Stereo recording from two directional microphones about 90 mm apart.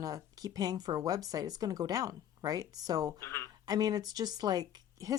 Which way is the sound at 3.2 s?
30° left (ahead or behind).